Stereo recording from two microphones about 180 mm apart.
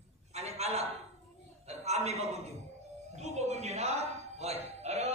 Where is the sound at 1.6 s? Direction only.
35° right (ahead or behind).